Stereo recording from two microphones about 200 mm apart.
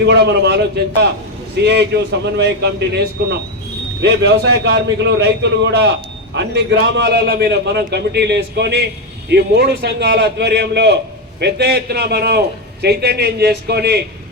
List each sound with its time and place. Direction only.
0.0 s a man's voice: 60° right (ahead or behind)
1.6 s a man's voice: 55° right (ahead or behind)